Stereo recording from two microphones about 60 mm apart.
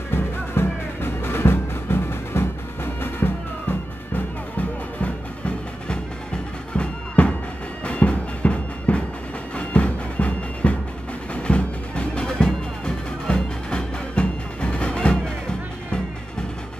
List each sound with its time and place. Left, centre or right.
0.1 s music: left
6.7 s music: centre